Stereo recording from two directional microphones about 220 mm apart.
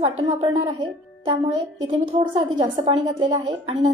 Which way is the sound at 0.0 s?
25° right (ahead or behind).